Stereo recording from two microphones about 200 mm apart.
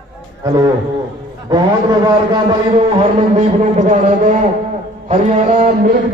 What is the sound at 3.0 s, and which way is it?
A man's voice, 35° right (ahead or behind).